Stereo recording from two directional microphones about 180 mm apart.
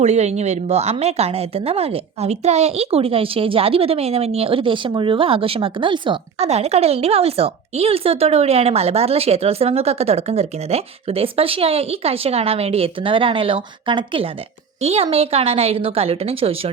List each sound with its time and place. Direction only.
0.0 s a woman's voice: 40° right (ahead or behind)